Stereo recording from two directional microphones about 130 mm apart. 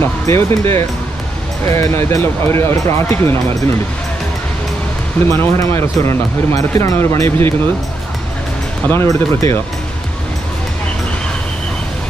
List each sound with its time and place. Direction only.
0.0 s speech: 20° left (ahead or behind)
5.3 s speech: 20° left (ahead or behind)
8.8 s speech: 20° left (ahead or behind)